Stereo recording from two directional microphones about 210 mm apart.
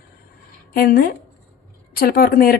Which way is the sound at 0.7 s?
45° left (ahead or behind).